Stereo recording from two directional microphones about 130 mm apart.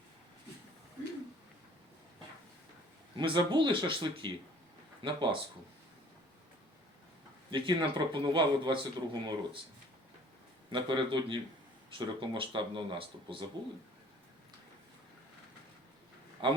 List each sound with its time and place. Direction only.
3.2 s a man's voice: 35° right (ahead or behind)
7.5 s a man's voice: 40° right (ahead or behind)
10.7 s a man's voice: 40° right (ahead or behind)
16.4 s a man's voice: 40° right (ahead or behind)